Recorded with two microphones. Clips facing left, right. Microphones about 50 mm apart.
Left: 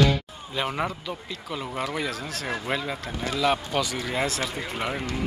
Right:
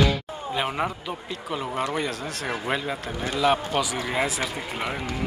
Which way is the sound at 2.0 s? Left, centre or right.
Centre.